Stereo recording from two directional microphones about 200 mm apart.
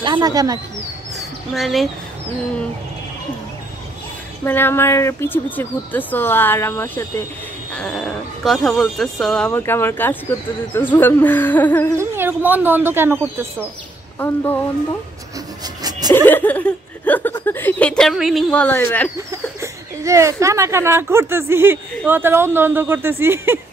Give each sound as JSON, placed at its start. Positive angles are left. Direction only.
{"t": 0.0, "sound": "speech", "side_deg": -20}
{"t": 1.5, "sound": "speech", "side_deg": 0}
{"t": 4.5, "sound": "speech", "side_deg": 10}
{"t": 12.0, "sound": "speech", "side_deg": -10}
{"t": 14.2, "sound": "speech", "side_deg": 10}
{"t": 15.6, "sound": "dog", "side_deg": -20}
{"t": 16.3, "sound": "speech", "side_deg": 10}
{"t": 19.1, "sound": "speech", "side_deg": -15}